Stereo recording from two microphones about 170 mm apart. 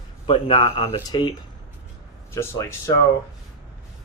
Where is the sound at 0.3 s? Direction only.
30° left (ahead or behind).